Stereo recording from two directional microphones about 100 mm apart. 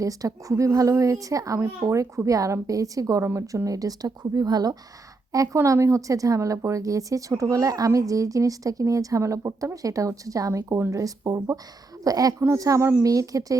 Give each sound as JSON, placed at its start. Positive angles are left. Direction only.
{"t": 0.0, "sound": "a woman's voice", "side_deg": -35}
{"t": 5.5, "sound": "a woman's voice", "side_deg": -30}